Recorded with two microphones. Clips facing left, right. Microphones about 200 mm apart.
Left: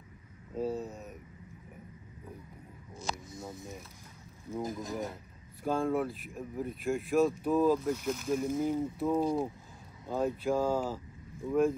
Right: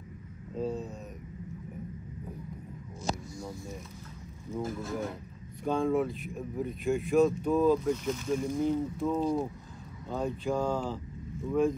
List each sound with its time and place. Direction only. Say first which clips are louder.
0.6 s a sound: even; 5° left (ahead or behind)
3.1 s music: right 5 dB; 45° right (ahead or behind)
4.6 s speech: right 2 dB; 15° left (ahead or behind)
5.6 s speech: right 2 dB; centre (ahead or behind)